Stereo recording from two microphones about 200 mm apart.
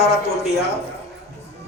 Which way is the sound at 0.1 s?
55° left (ahead or behind).